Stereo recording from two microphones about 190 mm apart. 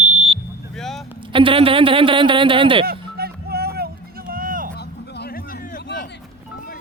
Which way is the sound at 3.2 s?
55° right (ahead or behind).